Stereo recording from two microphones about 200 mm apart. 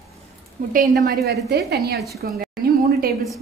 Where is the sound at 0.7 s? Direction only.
40° right (ahead or behind).